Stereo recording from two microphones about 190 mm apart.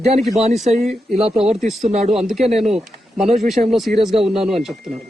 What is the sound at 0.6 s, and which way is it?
Speech, 35° right (ahead or behind).